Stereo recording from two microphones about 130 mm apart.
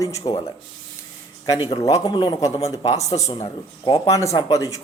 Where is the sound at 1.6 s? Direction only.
50° left (ahead or behind).